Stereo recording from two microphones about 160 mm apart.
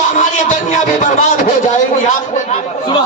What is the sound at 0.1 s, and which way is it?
Music, 50° left (ahead or behind).